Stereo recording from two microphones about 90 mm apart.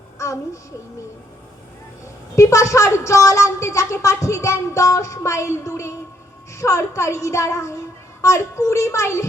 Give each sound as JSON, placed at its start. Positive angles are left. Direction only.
{"t": 0.2, "sound": "a woman's voice", "side_deg": 35}
{"t": 2.3, "sound": "a woman's voice", "side_deg": 35}